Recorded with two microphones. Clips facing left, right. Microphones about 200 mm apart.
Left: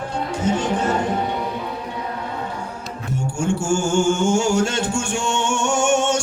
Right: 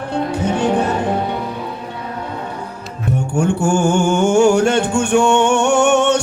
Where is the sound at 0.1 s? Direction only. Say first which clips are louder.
Right 4 dB; 60° right (ahead or behind).